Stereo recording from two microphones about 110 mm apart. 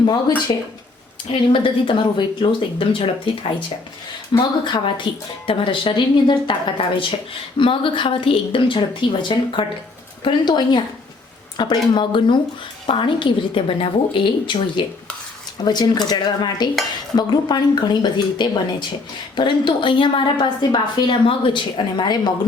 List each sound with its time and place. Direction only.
0.0 s speech: 40° left (ahead or behind)
1.3 s a woman's voice: 55° left (ahead or behind)
4.6 s a woman's voice: 45° left (ahead or behind)